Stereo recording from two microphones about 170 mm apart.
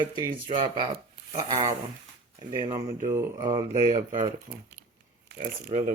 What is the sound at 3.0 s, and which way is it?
Mantra, 15° right (ahead or behind).